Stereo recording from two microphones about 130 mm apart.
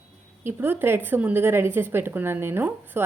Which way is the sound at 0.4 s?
15° right (ahead or behind).